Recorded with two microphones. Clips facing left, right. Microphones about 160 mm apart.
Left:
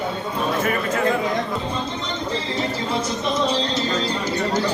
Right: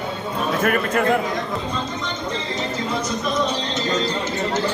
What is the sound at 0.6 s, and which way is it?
Speech, 60° right (ahead or behind).